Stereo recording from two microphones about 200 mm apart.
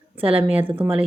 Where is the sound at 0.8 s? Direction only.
5° right (ahead or behind).